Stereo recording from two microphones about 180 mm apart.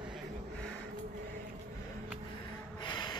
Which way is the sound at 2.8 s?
25° left (ahead or behind).